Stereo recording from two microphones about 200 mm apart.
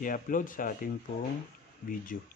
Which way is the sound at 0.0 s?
40° left (ahead or behind).